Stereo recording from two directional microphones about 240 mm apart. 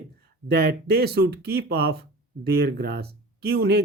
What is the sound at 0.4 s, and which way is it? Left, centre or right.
Speech, right.